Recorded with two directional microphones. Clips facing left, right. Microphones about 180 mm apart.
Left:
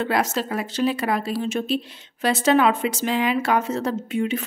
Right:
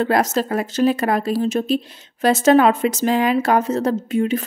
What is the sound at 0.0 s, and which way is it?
A woman's voice, 40° right (ahead or behind).